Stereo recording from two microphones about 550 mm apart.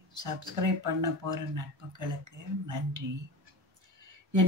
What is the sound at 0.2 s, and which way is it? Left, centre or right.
A woman's voice, right.